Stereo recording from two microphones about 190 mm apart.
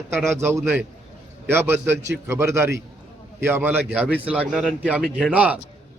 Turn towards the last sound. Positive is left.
turn(degrees=-5)  # may be behind; listen again after turning